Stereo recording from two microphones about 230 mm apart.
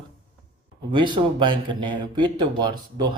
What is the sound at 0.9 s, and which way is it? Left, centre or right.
Speech, centre.